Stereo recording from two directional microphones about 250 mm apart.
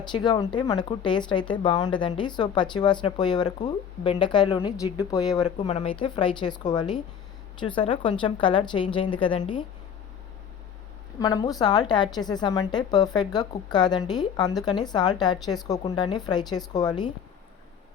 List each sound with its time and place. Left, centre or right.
0.0 s a woman's voice: centre
11.2 s a woman's voice: centre